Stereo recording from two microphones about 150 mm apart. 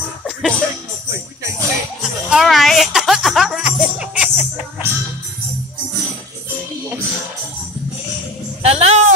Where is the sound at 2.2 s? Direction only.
Centre (ahead or behind).